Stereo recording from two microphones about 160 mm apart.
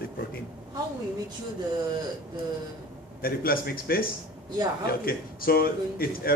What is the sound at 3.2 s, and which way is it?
A man's voice, 65° left (ahead or behind).